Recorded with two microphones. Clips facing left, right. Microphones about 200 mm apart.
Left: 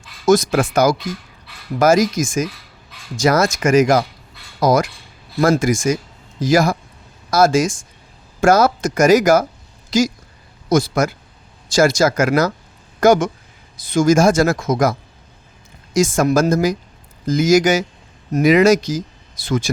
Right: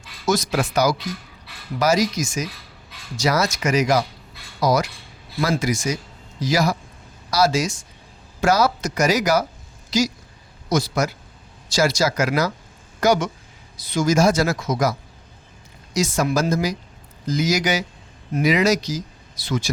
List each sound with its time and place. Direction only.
0.3 s speech: 50° left (ahead or behind)